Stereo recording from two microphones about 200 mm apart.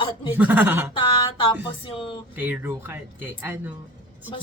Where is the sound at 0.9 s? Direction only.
25° left (ahead or behind).